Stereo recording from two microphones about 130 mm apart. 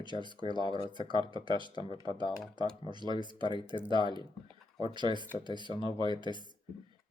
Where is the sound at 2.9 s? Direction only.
35° right (ahead or behind).